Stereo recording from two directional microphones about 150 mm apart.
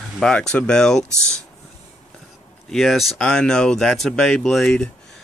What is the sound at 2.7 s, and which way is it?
Speech, centre (ahead or behind).